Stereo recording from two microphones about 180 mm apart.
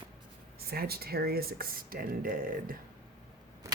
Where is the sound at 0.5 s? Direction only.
60° right (ahead or behind).